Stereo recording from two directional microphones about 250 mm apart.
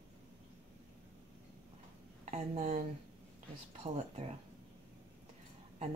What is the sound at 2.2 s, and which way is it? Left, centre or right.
A woman's voice, right.